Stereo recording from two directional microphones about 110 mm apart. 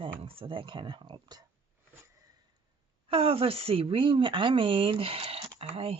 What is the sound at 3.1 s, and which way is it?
A woman's voice, 60° right (ahead or behind).